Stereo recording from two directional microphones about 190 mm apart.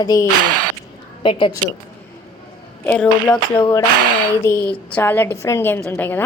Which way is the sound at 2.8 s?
10° left (ahead or behind).